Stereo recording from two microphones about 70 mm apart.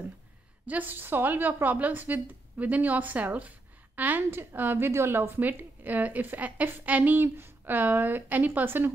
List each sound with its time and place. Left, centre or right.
0.7 s speech: right